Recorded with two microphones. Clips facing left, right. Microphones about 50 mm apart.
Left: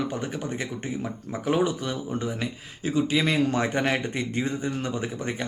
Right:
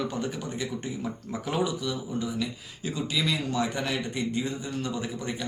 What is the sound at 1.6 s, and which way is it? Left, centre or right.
Speech, left.